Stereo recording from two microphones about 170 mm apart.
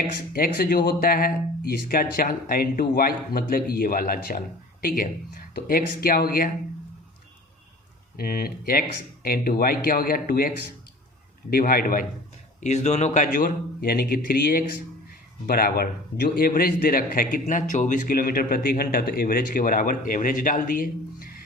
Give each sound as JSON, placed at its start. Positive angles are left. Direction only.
{"t": 0.3, "sound": "speech", "side_deg": 60}
{"t": 8.1, "sound": "speech", "side_deg": 60}
{"t": 11.5, "sound": "speech", "side_deg": 60}
{"t": 12.5, "sound": "speech", "side_deg": 45}